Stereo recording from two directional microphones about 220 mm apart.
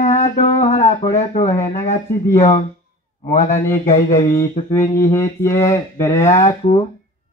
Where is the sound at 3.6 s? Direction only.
10° left (ahead or behind).